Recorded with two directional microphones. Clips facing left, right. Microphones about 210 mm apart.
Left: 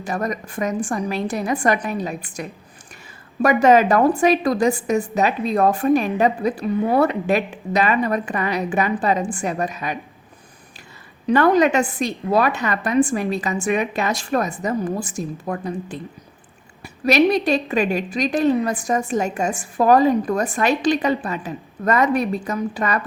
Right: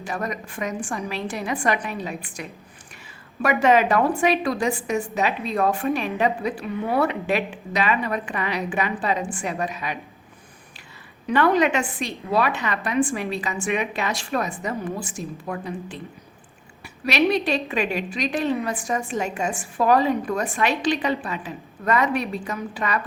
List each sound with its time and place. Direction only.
0.0 s a woman's voice: 40° left (ahead or behind)
11.3 s a woman's voice: 40° left (ahead or behind)